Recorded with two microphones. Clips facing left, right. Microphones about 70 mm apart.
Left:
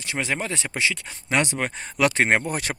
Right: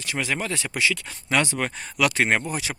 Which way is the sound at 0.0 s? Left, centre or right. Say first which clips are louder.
Even; left.